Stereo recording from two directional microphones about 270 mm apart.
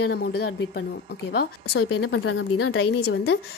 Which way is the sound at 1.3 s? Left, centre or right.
Left.